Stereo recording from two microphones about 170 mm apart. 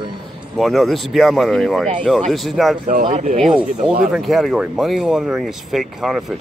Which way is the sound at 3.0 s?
40° right (ahead or behind).